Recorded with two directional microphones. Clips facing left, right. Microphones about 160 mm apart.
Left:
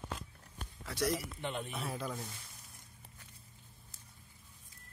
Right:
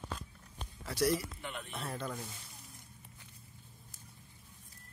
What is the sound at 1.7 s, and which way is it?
Speech, centre (ahead or behind).